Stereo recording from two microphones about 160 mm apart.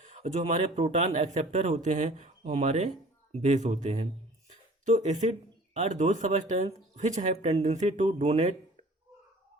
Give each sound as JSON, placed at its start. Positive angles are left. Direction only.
{"t": 0.0, "sound": "a man's voice", "side_deg": -45}